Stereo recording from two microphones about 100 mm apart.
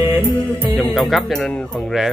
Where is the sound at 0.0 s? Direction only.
25° right (ahead or behind).